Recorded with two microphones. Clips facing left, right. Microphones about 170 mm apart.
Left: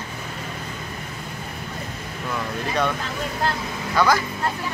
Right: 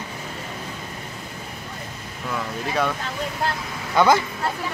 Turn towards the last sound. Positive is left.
turn(degrees=-20)  # may be behind; listen again after turning